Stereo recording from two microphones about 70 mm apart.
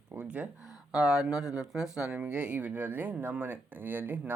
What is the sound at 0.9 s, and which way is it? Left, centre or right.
Speech, centre.